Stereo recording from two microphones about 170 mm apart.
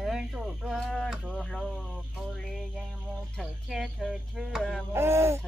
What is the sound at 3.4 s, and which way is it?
Music, centre (ahead or behind).